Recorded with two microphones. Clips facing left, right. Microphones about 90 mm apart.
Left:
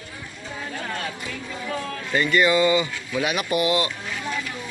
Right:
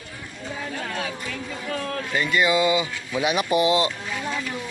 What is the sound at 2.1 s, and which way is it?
Speech, 5° right (ahead or behind).